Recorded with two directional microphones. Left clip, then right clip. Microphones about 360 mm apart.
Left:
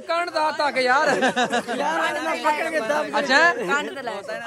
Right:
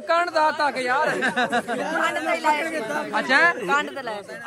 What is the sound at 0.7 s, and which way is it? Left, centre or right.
Speech, left.